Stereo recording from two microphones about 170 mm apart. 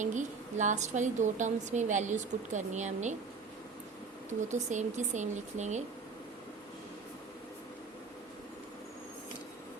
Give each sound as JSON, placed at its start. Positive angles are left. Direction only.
{"t": 0.0, "sound": "a woman's voice", "side_deg": -45}
{"t": 4.4, "sound": "a woman's voice", "side_deg": -45}